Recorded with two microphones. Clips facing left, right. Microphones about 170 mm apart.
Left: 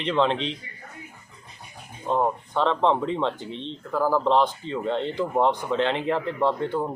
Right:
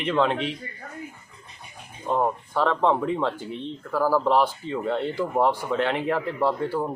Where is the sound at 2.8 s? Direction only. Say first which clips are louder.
Even; 10° right (ahead or behind).